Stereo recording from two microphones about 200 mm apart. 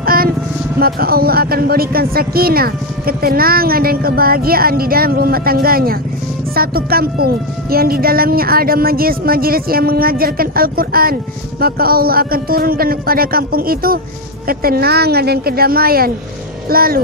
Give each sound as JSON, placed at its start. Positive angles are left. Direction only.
{"t": 0.0, "sound": "vehicle", "side_deg": -45}
{"t": 0.7, "sound": "speech", "side_deg": -50}